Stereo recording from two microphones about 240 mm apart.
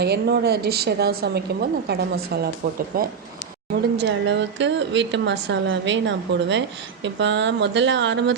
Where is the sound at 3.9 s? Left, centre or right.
Right.